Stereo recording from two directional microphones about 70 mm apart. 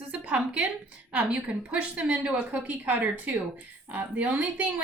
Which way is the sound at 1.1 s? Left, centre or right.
Centre.